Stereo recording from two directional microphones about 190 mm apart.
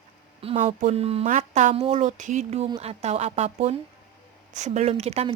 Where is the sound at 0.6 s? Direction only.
40° right (ahead or behind).